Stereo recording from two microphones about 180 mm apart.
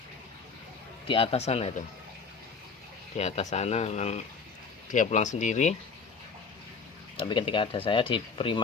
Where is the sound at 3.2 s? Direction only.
40° left (ahead or behind).